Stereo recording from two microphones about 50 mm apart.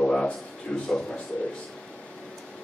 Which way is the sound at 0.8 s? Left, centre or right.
Left.